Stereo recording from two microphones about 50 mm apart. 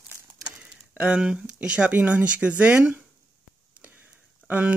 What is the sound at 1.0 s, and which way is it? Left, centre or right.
Speech, centre.